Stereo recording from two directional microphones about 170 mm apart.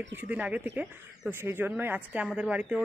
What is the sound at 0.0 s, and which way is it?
Speech, 10° right (ahead or behind).